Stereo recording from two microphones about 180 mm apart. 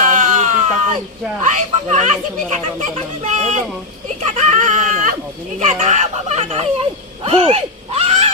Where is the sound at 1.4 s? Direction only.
40° right (ahead or behind).